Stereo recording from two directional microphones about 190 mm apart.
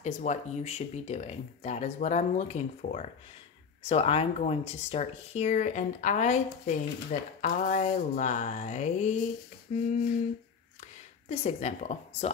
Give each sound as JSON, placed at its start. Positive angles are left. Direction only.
{"t": 0.0, "sound": "speech", "side_deg": 40}
{"t": 11.2, "sound": "speech", "side_deg": 35}